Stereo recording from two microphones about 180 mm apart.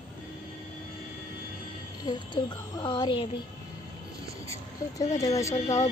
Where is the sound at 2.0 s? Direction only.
25° left (ahead or behind).